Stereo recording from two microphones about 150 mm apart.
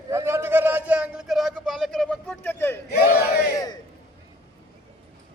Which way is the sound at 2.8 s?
90° left.